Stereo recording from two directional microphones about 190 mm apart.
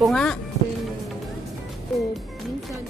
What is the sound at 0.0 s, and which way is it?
Speech, 5° left (ahead or behind).